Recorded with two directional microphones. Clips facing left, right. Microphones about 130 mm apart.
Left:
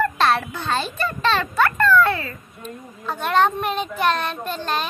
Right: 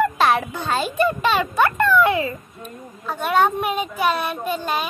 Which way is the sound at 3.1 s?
5° right (ahead or behind).